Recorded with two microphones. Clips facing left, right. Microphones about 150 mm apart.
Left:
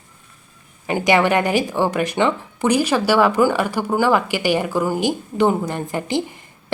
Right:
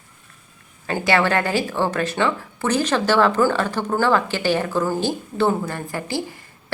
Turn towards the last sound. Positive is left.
turn(degrees=20)  # may be behind; listen again after turning